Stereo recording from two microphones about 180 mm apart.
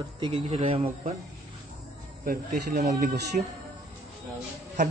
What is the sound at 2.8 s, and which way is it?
Speech, 40° right (ahead or behind).